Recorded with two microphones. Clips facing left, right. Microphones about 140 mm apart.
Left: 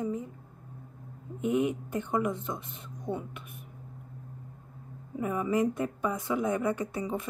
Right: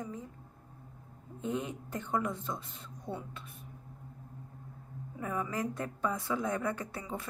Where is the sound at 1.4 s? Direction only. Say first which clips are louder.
Left 8 dB; 15° left (ahead or behind).